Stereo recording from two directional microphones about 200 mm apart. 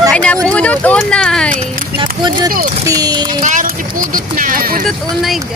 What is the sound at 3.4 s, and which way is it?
Speech, 40° right (ahead or behind).